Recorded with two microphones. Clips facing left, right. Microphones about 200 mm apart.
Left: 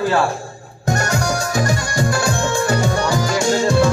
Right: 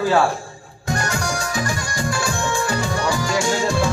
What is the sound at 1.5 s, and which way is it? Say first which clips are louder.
Music: left 5 dB; 40° left (ahead or behind).